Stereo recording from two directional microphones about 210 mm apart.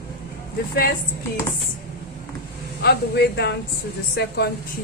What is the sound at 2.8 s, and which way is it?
A woman's voice, 50° left (ahead or behind).